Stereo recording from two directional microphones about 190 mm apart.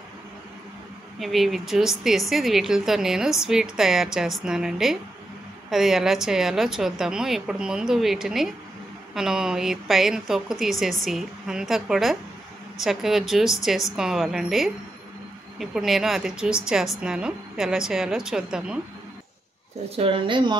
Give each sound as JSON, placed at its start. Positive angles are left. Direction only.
{"t": 1.2, "sound": "speech", "side_deg": 0}
{"t": 20.0, "sound": "speech", "side_deg": -25}